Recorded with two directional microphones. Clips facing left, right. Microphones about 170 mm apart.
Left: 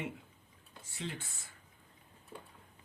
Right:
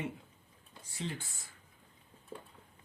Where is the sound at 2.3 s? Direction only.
35° right (ahead or behind).